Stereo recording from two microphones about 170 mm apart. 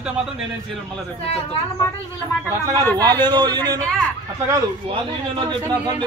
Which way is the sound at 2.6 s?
20° right (ahead or behind).